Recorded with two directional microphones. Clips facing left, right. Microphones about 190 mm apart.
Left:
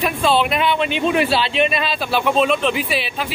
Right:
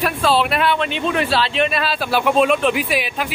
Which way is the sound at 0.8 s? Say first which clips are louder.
Left 2 dB; 10° left (ahead or behind).